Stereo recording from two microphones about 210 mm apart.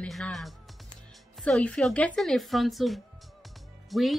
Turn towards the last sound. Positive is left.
turn(degrees=0)  # may be behind; listen again after turning